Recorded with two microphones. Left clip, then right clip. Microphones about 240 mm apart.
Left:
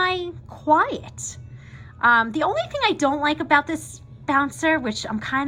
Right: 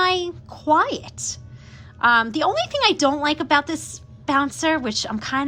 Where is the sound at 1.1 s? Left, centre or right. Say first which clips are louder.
Right 5 dB; centre.